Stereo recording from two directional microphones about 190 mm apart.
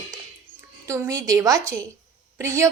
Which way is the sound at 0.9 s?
15° right (ahead or behind).